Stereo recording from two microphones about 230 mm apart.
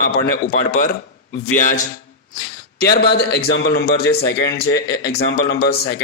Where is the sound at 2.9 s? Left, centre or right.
Left.